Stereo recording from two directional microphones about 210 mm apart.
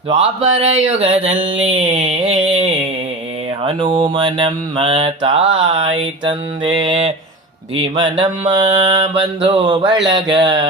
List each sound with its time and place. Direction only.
0.1 s mantra: 25° right (ahead or behind)
3.8 s mantra: 20° right (ahead or behind)